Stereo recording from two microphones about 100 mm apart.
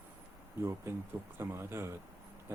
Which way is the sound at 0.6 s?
25° right (ahead or behind).